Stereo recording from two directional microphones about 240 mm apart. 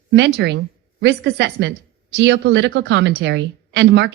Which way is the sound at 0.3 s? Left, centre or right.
Right.